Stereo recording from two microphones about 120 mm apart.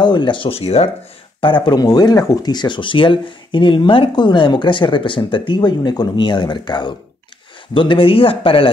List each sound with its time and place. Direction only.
0.0 s speech: 40° left (ahead or behind); by 0.8 s 55° left (ahead or behind)
1.4 s speech: 40° left (ahead or behind)